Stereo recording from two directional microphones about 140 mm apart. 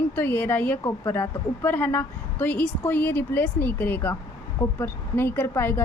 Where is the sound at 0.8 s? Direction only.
25° left (ahead or behind).